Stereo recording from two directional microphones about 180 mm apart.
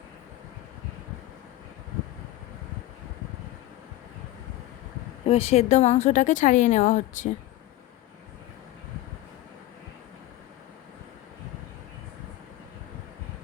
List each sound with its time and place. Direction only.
5.2 s speech: 35° left (ahead or behind)